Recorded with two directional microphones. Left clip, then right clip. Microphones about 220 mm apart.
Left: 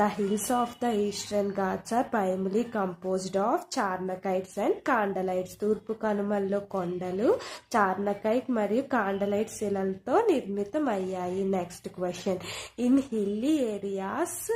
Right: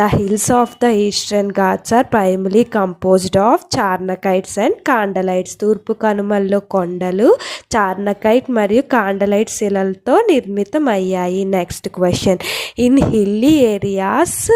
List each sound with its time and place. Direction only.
0.0 s a woman's voice: 40° right (ahead or behind)